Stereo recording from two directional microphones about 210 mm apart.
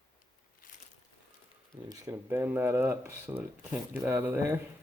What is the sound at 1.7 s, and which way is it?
Speech, 15° right (ahead or behind).